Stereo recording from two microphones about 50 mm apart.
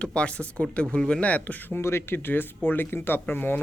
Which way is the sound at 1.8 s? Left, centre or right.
Left.